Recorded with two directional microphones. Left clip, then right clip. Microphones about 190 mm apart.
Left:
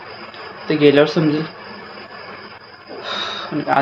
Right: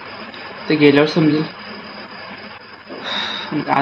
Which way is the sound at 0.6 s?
Centre (ahead or behind).